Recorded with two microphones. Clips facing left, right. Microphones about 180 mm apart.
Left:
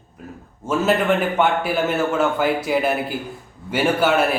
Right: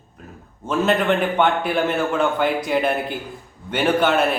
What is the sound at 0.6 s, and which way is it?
A man's voice, 5° left (ahead or behind).